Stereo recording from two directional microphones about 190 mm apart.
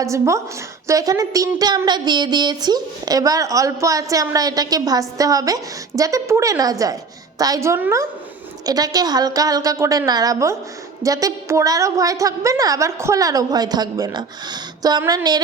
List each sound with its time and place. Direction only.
0.0 s a woman's voice: 15° right (ahead or behind)